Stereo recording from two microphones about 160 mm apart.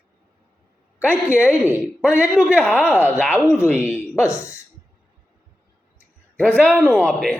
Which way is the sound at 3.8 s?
15° left (ahead or behind).